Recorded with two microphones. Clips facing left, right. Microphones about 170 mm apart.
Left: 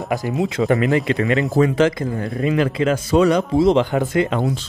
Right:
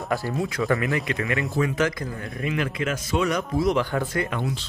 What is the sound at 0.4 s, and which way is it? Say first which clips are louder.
Speech: left 8 dB; 25° left (ahead or behind).